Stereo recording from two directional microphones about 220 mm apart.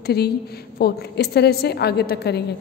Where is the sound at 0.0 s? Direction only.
45° left (ahead or behind).